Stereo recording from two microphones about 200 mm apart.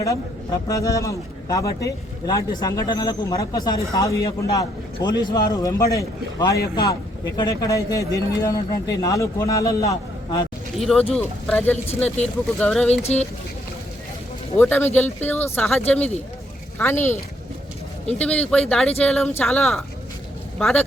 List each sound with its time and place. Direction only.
0.7 s a man's voice: 15° left (ahead or behind)
10.8 s speech: centre (ahead or behind)
11.9 s speech: 30° left (ahead or behind)
12.5 s speech: 5° left (ahead or behind)
12.9 s speech: 30° left (ahead or behind)
14.6 s a man's voice: 10° left (ahead or behind)
18.2 s speech: 5° left (ahead or behind)